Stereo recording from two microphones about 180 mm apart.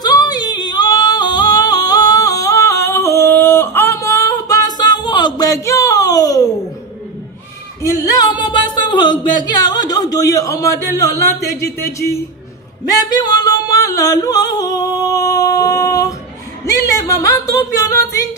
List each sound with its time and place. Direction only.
0.0 s yodeling: 20° left (ahead or behind)
7.8 s a sound: 20° left (ahead or behind)
12.8 s music: 20° left (ahead or behind)
16.6 s speech: 20° left (ahead or behind)